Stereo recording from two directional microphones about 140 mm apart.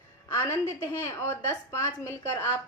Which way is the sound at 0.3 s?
20° left (ahead or behind).